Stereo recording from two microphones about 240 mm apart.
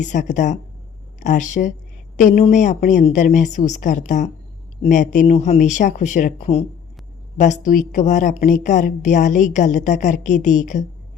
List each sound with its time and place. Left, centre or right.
0.0 s a woman's voice: left